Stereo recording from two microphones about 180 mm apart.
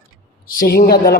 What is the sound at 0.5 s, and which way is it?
Speech, 60° left (ahead or behind).